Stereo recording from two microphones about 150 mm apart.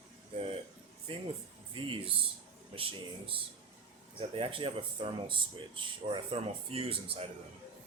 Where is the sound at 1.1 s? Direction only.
40° right (ahead or behind).